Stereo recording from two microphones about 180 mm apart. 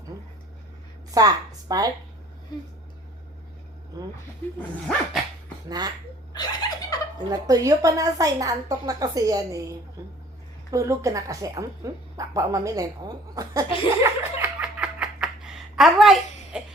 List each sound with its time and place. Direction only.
1.1 s a woman's voice: 20° right (ahead or behind)
5.6 s speech: 20° right (ahead or behind)
6.3 s snicker: 20° left (ahead or behind)
7.3 s speech: 20° right (ahead or behind)
14.0 s laughter: 5° right (ahead or behind)